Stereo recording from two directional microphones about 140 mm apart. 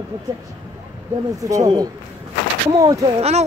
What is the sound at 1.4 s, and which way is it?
Speech, 25° right (ahead or behind).